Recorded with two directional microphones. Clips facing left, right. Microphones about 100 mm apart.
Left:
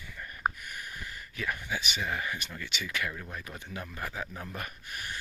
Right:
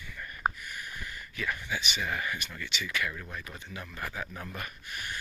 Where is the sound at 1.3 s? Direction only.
35° left (ahead or behind).